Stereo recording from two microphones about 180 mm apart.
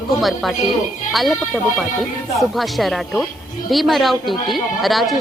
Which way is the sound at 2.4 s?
Centre (ahead or behind).